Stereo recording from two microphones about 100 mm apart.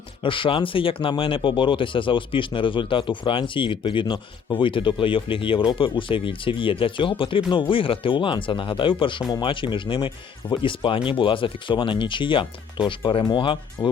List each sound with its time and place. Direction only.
0.2 s speech: 60° left (ahead or behind)